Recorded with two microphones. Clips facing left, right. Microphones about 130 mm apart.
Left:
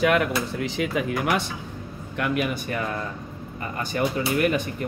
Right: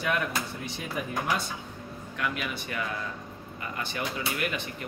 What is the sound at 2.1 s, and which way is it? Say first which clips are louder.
Speech: left 8 dB; 50° left (ahead or behind).